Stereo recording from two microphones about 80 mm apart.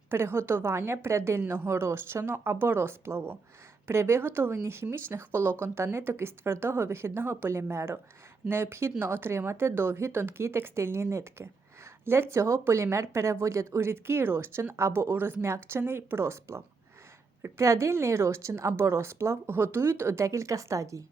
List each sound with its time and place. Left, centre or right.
0.1 s speech: right